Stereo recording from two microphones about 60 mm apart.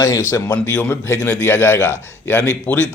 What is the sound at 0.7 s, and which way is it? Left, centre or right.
Speech, left.